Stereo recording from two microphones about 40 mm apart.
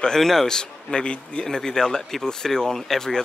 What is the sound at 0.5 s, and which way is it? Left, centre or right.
Speech, left.